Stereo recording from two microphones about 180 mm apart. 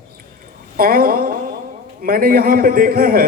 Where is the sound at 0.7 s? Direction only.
55° right (ahead or behind).